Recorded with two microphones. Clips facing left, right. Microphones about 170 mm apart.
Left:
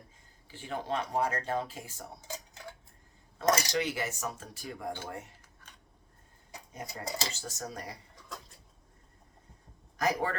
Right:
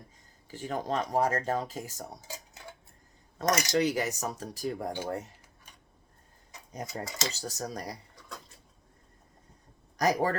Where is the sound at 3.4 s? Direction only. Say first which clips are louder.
Even; 30° left (ahead or behind).